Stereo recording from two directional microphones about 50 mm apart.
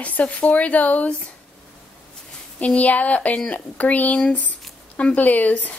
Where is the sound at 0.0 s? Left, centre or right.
Left.